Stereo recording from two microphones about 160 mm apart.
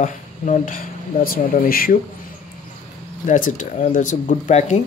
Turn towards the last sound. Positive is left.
turn(degrees=45)  # may be behind; listen again after turning